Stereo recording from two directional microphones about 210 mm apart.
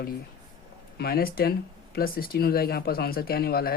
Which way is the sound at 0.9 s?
45° left (ahead or behind).